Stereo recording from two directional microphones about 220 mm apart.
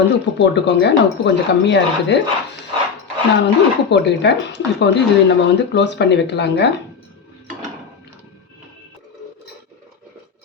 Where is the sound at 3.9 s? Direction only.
50° left (ahead or behind).